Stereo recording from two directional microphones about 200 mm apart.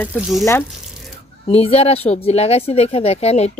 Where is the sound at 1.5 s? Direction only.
30° left (ahead or behind).